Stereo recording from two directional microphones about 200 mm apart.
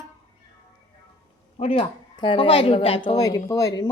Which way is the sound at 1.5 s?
30° left (ahead or behind).